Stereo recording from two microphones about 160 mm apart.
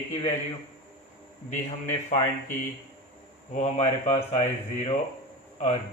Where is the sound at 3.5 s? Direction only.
45° left (ahead or behind).